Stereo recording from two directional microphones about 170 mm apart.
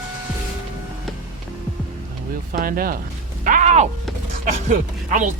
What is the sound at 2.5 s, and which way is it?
Speech, 55° right (ahead or behind).